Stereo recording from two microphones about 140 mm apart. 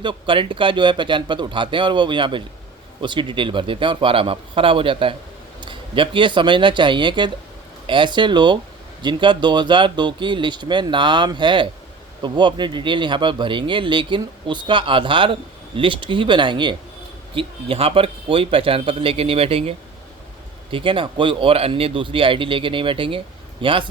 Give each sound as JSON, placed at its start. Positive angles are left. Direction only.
{"t": 0.0, "sound": "speech", "side_deg": -35}